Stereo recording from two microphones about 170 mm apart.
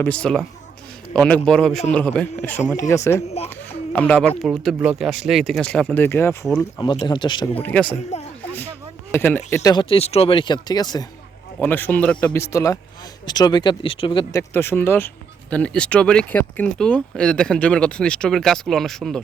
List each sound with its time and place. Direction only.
0.0 s a man's voice: 5° left (ahead or behind)
3.9 s speech: 5° left (ahead or behind)
7.0 s speech: 25° left (ahead or behind)
7.6 s a man's voice: 10° left (ahead or behind)
9.1 s a man's voice: 15° left (ahead or behind)
9.6 s speech: 30° left (ahead or behind)
11.6 s a man's voice: 10° left (ahead or behind); by 14.4 s 30° left (ahead or behind)
14.5 s speech: 15° left (ahead or behind)